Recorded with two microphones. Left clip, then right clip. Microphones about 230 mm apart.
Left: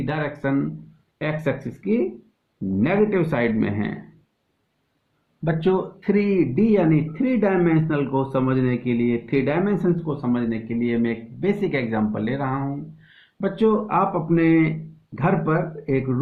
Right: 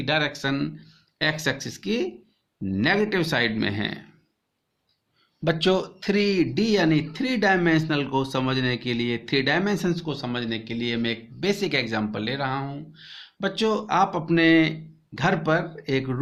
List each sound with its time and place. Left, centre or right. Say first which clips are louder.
0.0 s speech: right 2 dB; right
2.8 s speech: left 2 dB; right
5.5 s speech: even; right